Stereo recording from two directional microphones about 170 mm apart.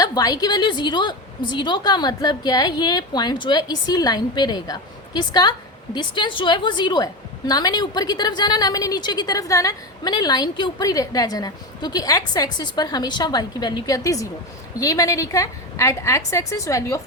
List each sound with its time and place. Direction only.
0.0 s a woman's voice: 20° left (ahead or behind)